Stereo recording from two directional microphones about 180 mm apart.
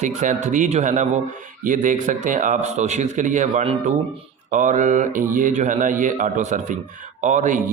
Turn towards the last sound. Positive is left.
turn(degrees=-45)  # may be behind; listen again after turning